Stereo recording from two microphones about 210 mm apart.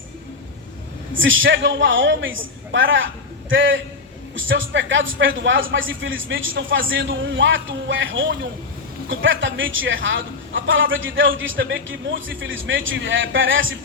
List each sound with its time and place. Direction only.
1.1 s a man's voice: 65° right (ahead or behind)